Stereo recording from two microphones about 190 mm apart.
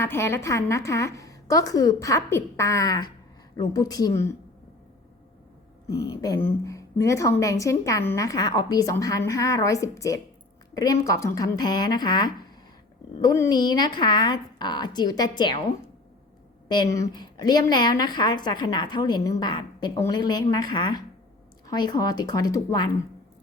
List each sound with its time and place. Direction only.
0.0 s a woman's voice: 15° left (ahead or behind)
5.9 s a woman's voice: 20° left (ahead or behind)
16.6 s a woman's voice: 20° left (ahead or behind)